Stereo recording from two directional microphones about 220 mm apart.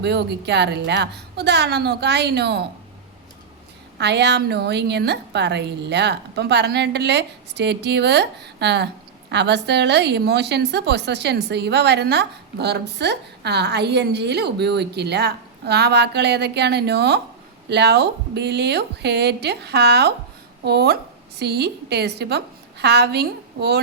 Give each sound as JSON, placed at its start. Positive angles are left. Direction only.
{"t": 0.0, "sound": "a woman's voice", "side_deg": -50}
{"t": 3.9, "sound": "a woman's voice", "side_deg": -50}